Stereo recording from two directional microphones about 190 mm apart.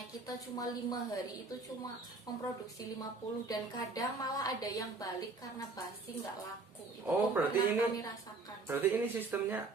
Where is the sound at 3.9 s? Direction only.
20° left (ahead or behind).